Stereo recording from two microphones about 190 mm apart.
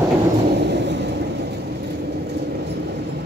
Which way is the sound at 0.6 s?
65° right (ahead or behind).